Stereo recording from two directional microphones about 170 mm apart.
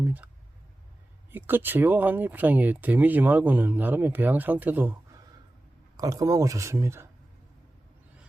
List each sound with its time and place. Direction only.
0.0 s clicking: 10° right (ahead or behind)
1.3 s speech: 10° right (ahead or behind)
6.0 s speech: 20° right (ahead or behind)